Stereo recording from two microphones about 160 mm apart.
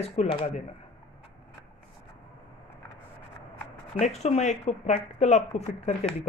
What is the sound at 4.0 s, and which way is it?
Speech, 45° left (ahead or behind).